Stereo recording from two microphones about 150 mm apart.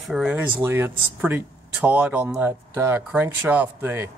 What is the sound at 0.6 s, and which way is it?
Speech, 15° right (ahead or behind).